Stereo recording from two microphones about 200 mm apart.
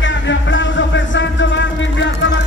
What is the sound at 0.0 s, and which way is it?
Music, 65° left (ahead or behind).